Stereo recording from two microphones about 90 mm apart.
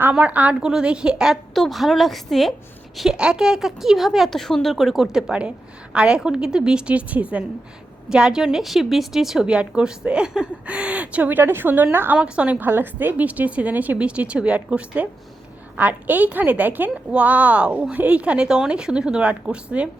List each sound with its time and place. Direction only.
0.0 s a woman's voice: 15° right (ahead or behind)